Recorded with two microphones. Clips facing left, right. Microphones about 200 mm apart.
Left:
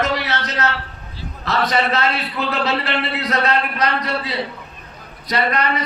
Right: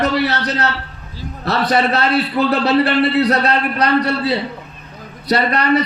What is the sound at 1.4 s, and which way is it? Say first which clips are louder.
A man's voice: right 3 dB; 35° right (ahead or behind).